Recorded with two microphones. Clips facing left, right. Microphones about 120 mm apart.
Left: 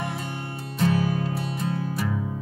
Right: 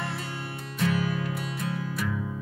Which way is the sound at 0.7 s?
30° left (ahead or behind).